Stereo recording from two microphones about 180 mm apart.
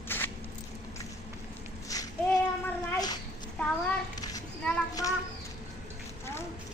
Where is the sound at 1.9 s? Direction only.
20° left (ahead or behind).